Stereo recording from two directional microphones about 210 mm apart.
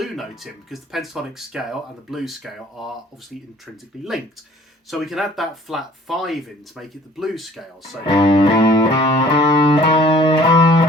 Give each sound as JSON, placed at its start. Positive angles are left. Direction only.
{"t": 0.0, "sound": "speech", "side_deg": 0}
{"t": 3.9, "sound": "speech", "side_deg": 0}
{"t": 8.0, "sound": "music", "side_deg": 20}